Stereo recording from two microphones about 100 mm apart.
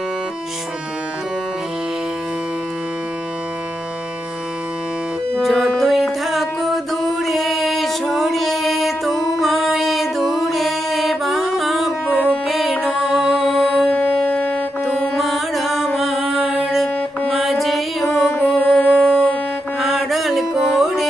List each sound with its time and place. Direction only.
5.4 s music: centre (ahead or behind)
16.0 s mantra: centre (ahead or behind)
18.3 s music: 15° left (ahead or behind)
18.5 s wind instrument: 10° left (ahead or behind)
19.8 s mantra: centre (ahead or behind)